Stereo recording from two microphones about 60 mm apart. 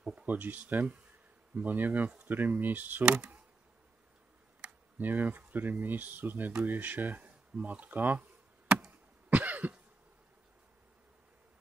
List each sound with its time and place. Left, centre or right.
0.0 s speech: centre
4.6 s speech: right
8.7 s insect: centre
9.3 s cough: right